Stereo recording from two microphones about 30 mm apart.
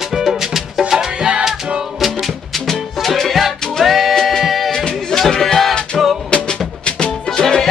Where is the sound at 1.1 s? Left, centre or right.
Right.